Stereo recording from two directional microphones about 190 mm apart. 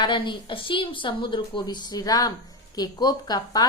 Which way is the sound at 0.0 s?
25° left (ahead or behind).